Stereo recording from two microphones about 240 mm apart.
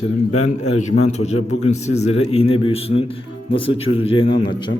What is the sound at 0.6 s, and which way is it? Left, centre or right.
Speech, left.